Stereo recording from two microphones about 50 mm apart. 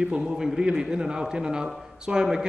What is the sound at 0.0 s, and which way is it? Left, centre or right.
A man's voice, centre.